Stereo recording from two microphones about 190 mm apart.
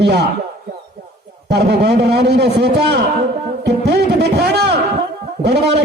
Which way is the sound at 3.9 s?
60° right (ahead or behind).